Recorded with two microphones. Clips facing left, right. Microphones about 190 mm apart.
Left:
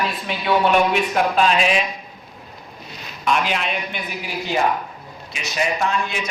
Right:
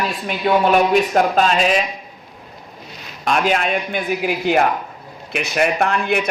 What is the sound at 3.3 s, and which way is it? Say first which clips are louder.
A man's voice: right 4 dB; 45° right (ahead or behind).